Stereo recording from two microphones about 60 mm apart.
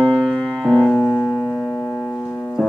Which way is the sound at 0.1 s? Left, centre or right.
Centre.